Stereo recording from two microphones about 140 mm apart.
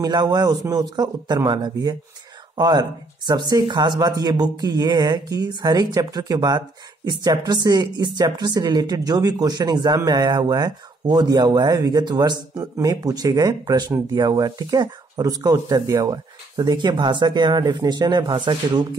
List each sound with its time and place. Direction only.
0.0 s speech: 30° right (ahead or behind)